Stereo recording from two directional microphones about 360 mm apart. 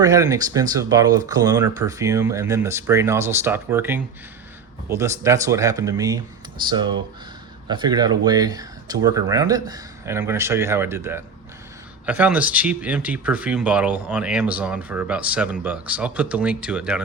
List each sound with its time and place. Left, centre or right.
0.0 s speech: centre
7.7 s speech: centre